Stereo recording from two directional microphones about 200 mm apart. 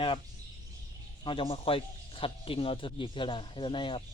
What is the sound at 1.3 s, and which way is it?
A man's voice, 25° left (ahead or behind).